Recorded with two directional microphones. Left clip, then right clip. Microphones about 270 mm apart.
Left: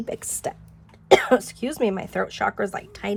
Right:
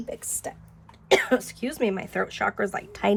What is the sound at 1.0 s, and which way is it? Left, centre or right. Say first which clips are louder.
A woman's voice: left 5 dB; centre.